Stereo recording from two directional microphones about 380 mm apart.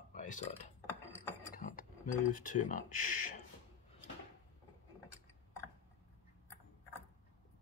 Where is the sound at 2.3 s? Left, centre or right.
Left.